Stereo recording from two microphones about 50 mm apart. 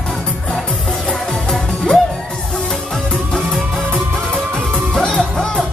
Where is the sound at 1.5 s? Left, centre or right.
Centre.